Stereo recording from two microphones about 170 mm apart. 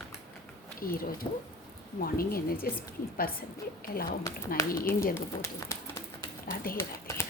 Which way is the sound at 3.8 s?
60° left (ahead or behind).